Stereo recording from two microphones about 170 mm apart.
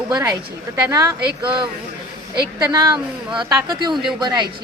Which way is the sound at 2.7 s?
20° right (ahead or behind).